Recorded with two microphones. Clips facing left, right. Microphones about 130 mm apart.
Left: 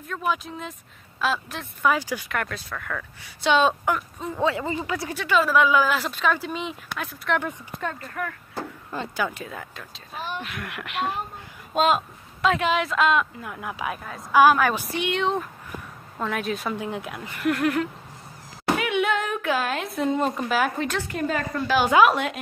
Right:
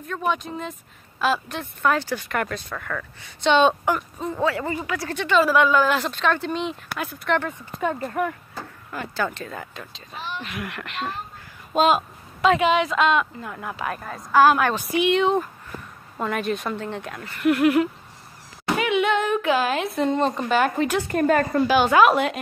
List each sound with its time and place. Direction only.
0.0 s speech: centre (ahead or behind)
2.3 s speech: 5° right (ahead or behind)
4.4 s speech: 20° left (ahead or behind)
5.1 s speech: 5° left (ahead or behind)
8.0 s speech: 25° right (ahead or behind)
8.5 s a sound: 25° left (ahead or behind)
9.1 s a woman's voice: 10° left (ahead or behind)
17.4 s a woman's voice: 5° right (ahead or behind)
21.1 s a woman's voice: 50° right (ahead or behind)
21.7 s speech: 5° left (ahead or behind)